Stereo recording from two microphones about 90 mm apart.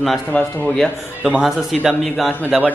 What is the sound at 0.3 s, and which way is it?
Speech, 20° left (ahead or behind).